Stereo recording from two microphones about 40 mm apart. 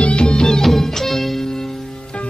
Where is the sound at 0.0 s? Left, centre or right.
Left.